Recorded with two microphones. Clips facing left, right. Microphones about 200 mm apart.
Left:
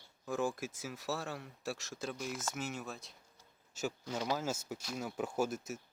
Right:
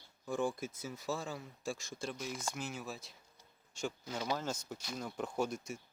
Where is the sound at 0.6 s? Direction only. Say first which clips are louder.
Even; 90° left.